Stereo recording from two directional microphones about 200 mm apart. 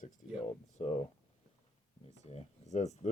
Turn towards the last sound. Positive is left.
turn(degrees=35)  # may be behind; listen again after turning